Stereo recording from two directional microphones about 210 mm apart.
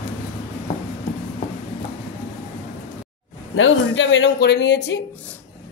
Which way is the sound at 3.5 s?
65° left (ahead or behind).